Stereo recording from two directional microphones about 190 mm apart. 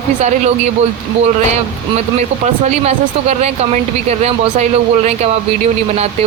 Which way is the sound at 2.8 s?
35° right (ahead or behind).